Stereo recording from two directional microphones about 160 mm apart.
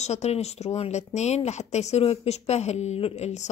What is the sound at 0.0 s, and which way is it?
A woman's voice, 45° left (ahead or behind).